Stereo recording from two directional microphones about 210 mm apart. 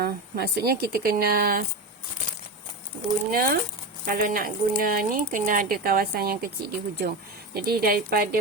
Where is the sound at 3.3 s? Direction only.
45° right (ahead or behind).